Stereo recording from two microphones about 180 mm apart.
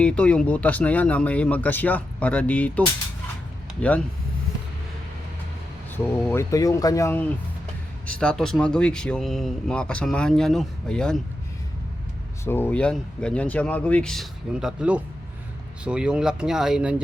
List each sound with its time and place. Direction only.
0.0 s speech: 5° left (ahead or behind)
6.2 s speech: 15° left (ahead or behind)
12.5 s speech: 10° left (ahead or behind)